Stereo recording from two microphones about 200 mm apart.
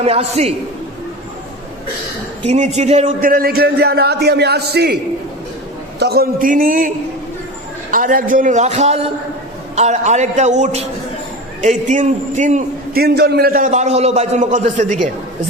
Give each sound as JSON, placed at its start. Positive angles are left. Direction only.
{"t": 0.0, "sound": "a man's voice", "side_deg": -30}
{"t": 2.5, "sound": "a man's voice", "side_deg": -35}
{"t": 6.0, "sound": "a man's voice", "side_deg": -50}